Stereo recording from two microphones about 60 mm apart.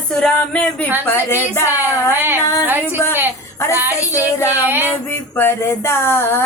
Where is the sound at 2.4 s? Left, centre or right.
Left.